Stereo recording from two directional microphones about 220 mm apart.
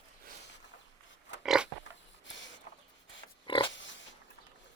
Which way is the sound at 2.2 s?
55° left (ahead or behind).